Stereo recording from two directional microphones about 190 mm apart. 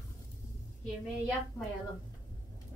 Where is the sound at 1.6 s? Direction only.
15° left (ahead or behind).